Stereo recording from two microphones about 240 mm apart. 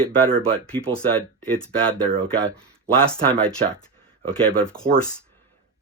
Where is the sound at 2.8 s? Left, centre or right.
Centre.